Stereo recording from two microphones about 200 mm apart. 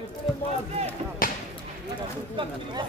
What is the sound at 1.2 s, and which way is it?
Basketball bounce, 45° left (ahead or behind).